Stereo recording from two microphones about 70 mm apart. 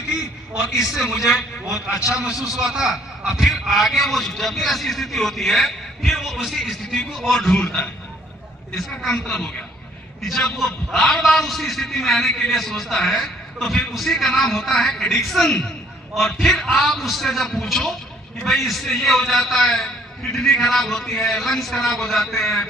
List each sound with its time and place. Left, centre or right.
0.8 s a man's voice: centre
7.4 s speech: centre
8.7 s a man's voice: centre